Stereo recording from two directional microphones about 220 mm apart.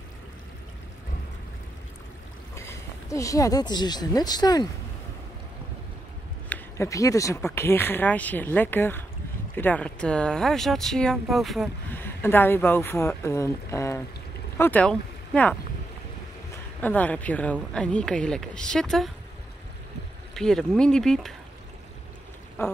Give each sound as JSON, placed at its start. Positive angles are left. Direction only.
{"t": 2.5, "sound": "speech", "side_deg": 10}
{"t": 6.5, "sound": "speech", "side_deg": 15}
{"t": 16.8, "sound": "a woman's voice", "side_deg": 5}
{"t": 20.3, "sound": "a woman's voice", "side_deg": 0}